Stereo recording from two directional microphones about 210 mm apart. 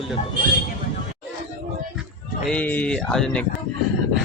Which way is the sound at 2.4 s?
5° left (ahead or behind).